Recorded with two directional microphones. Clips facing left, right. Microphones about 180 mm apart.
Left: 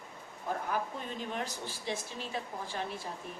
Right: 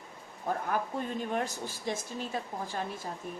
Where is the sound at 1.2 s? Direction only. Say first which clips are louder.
Right 3 dB; 50° right (ahead or behind).